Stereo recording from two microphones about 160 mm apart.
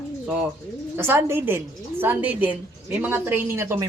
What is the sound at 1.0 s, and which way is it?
A man's voice, 15° right (ahead or behind).